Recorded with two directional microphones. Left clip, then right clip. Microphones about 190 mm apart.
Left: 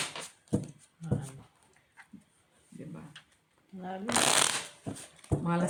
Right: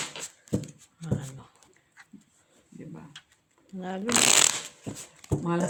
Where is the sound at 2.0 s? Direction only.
25° right (ahead or behind).